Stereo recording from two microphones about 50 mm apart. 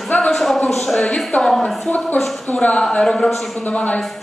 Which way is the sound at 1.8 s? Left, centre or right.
Left.